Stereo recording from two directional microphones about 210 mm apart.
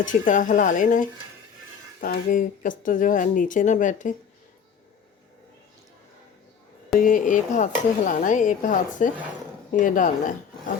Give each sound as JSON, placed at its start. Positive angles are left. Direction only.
{"t": 0.0, "sound": "speech", "side_deg": 40}
{"t": 7.0, "sound": "speech", "side_deg": 40}